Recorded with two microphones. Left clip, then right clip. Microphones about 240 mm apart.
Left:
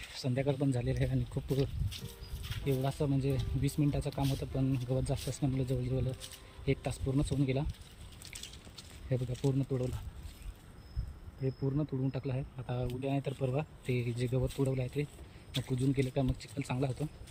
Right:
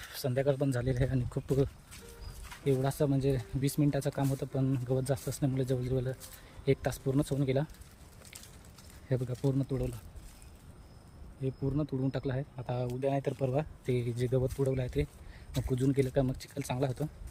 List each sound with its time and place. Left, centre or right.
0.0 s speech: centre
2.5 s speech: centre
9.0 s speech: centre
11.4 s speech: centre
11.9 s speech: centre